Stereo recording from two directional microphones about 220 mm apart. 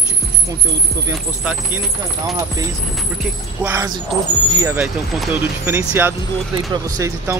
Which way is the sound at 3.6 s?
15° right (ahead or behind).